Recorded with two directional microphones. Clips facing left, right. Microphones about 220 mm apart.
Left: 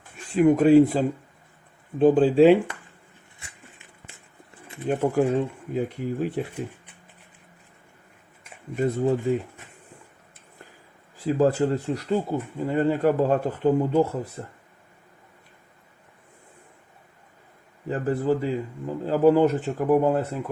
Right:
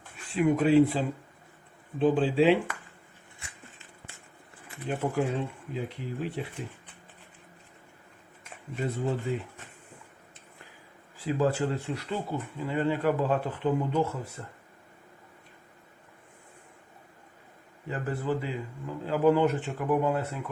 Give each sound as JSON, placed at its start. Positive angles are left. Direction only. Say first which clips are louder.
{"t": 0.3, "sound": "speech", "louder": "left 6 dB", "side_deg": 45}
{"t": 4.9, "sound": "speech", "louder": "left 7 dB", "side_deg": 45}
{"t": 9.3, "sound": "speech", "louder": "left 8 dB", "side_deg": 45}
{"t": 11.2, "sound": "speech", "louder": "left 6 dB", "side_deg": 40}
{"t": 17.8, "sound": "speech", "louder": "left 7 dB", "side_deg": 40}